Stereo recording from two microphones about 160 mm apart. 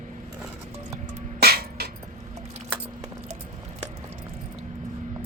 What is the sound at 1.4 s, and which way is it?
Music, 75° right (ahead or behind).